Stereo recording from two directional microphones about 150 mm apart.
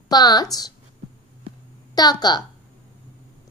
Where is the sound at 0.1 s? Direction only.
25° left (ahead or behind).